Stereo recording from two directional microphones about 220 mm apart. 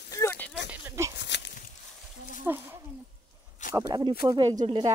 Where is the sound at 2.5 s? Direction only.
10° right (ahead or behind).